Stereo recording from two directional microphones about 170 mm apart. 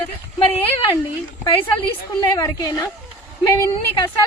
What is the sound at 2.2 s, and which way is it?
A woman's voice, 20° left (ahead or behind).